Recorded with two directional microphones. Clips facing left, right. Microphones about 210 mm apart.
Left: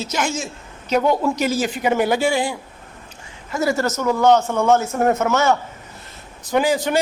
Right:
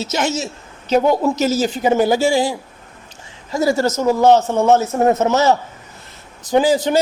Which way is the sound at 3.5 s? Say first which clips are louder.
Right 4 dB; 35° right (ahead or behind).